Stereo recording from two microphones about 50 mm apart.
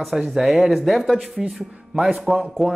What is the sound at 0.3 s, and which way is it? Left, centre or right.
Speech, centre.